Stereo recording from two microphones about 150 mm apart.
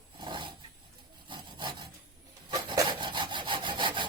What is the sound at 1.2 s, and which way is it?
Wood, 30° right (ahead or behind).